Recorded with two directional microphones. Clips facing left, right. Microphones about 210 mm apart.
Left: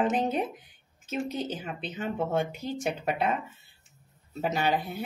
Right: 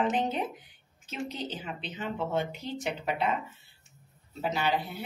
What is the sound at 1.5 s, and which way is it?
A woman's voice, 50° left (ahead or behind).